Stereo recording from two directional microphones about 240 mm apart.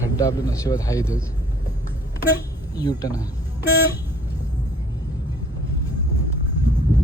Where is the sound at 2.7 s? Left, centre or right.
Centre.